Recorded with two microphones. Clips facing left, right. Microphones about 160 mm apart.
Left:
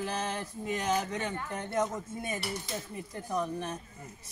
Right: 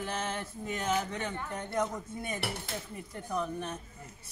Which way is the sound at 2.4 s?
60° right (ahead or behind).